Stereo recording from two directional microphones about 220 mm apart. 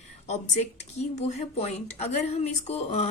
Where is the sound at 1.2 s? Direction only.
30° left (ahead or behind).